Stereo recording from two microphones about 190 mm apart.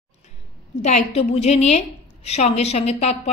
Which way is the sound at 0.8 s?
35° left (ahead or behind).